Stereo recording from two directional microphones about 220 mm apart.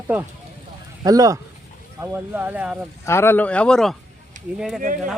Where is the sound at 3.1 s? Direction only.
10° left (ahead or behind).